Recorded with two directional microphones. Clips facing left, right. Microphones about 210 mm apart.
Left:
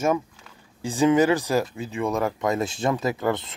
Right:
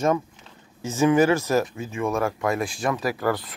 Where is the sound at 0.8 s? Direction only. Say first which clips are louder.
Even; 15° left (ahead or behind).